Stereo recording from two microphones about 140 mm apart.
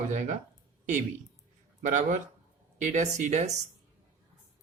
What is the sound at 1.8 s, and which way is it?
Speech, 65° right (ahead or behind).